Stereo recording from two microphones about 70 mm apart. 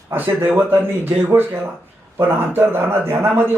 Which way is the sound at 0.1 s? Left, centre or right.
Right.